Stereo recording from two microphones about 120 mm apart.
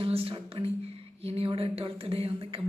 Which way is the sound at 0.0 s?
50° right (ahead or behind).